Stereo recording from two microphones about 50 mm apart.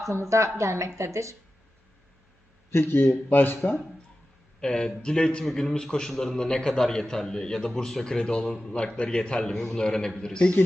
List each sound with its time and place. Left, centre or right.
0.1 s speech: right
2.8 s speech: left
4.6 s a man's voice: centre